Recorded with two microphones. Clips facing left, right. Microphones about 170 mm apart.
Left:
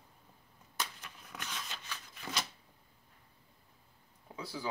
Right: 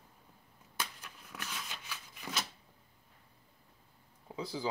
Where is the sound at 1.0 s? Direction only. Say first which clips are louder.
Even; centre (ahead or behind).